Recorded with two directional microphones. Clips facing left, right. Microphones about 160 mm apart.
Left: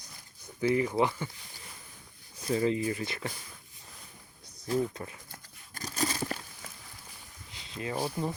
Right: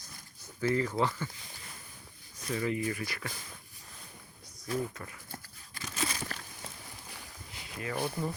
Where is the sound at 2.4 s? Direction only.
30° left (ahead or behind).